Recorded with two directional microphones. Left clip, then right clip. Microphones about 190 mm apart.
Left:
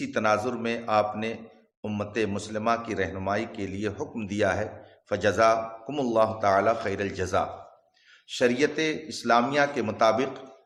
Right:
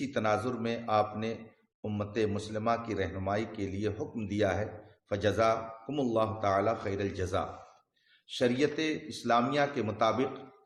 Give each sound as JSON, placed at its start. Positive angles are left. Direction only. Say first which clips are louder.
{"t": 0.0, "sound": "a man's voice", "louder": "left 5 dB", "side_deg": 15}